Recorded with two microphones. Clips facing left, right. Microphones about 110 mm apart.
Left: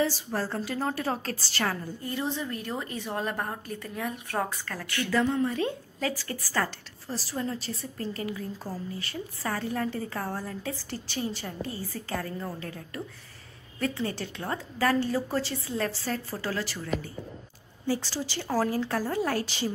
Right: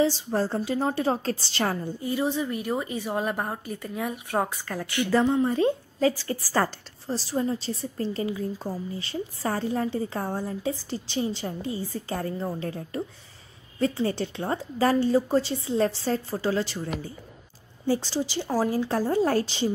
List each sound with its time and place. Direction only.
0.0 s speech: 20° right (ahead or behind)
2.0 s a woman's voice: 5° right (ahead or behind); by 19.7 s 25° right (ahead or behind)